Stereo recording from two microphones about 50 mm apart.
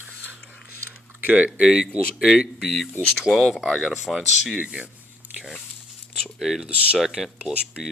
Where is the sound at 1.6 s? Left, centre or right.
Centre.